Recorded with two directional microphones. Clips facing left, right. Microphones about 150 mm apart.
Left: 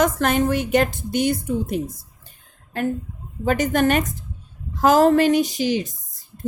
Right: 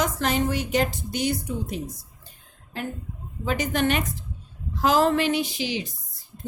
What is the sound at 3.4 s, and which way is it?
A woman's voice, 50° left (ahead or behind).